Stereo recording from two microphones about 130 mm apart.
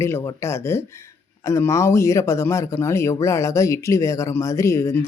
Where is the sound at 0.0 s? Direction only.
20° left (ahead or behind).